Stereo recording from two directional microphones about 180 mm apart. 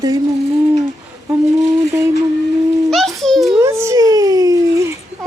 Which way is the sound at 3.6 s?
15° right (ahead or behind).